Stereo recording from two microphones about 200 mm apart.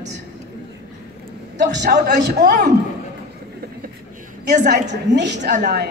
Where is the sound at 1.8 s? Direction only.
55° right (ahead or behind).